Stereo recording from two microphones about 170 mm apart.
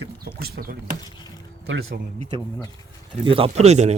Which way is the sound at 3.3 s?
30° right (ahead or behind).